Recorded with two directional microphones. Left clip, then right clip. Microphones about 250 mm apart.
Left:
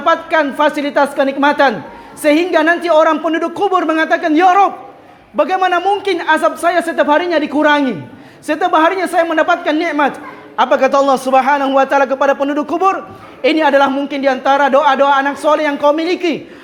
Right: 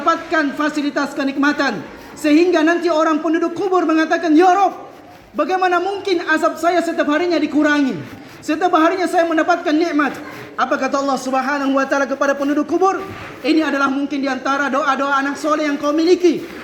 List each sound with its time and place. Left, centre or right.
0.0 s a man's voice: left